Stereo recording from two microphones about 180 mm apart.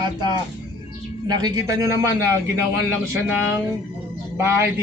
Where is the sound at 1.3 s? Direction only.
20° right (ahead or behind).